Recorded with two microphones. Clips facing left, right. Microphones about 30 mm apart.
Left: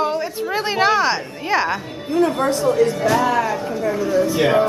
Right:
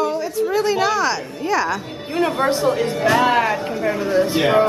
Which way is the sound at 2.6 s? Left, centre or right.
Right.